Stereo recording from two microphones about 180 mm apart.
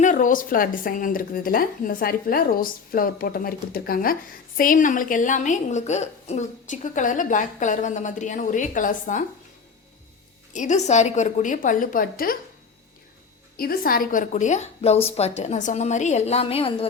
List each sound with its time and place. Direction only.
0.0 s speech: 45° left (ahead or behind)
10.5 s speech: 45° left (ahead or behind)
13.6 s a woman's voice: 55° left (ahead or behind); by 16.7 s 30° left (ahead or behind)